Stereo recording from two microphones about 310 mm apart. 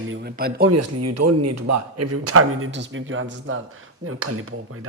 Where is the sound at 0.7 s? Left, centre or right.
Right.